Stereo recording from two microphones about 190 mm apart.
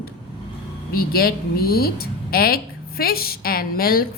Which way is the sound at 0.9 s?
50° left (ahead or behind).